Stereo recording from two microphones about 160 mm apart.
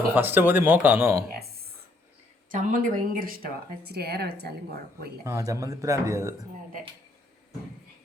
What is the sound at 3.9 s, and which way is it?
Speech, 80° right.